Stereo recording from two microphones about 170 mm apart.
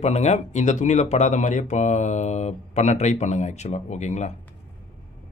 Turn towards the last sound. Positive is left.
turn(degrees=45)  # may be behind; listen again after turning